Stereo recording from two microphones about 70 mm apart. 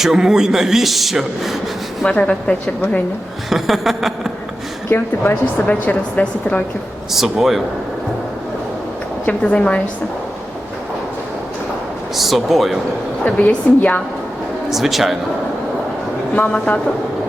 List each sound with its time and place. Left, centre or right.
0.0 s speech: centre
2.0 s a woman's voice: centre
3.5 s speech: centre
4.9 s a woman's voice: left
7.1 s speech: centre
9.2 s a woman's voice: centre
12.1 s speech: centre
13.2 s a woman's voice: left
14.7 s speech: centre
16.3 s a woman's voice: left